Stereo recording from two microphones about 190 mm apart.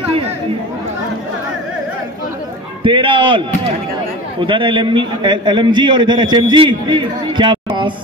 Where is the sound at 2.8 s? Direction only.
25° right (ahead or behind).